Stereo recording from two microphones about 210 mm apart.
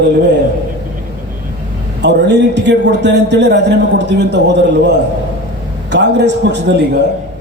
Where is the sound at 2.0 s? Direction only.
55° right (ahead or behind).